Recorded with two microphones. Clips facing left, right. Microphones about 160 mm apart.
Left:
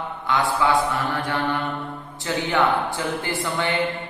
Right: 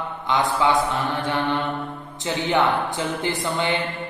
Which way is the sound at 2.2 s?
20° right (ahead or behind).